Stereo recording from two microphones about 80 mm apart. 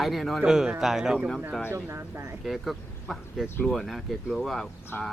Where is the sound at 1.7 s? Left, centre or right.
Right.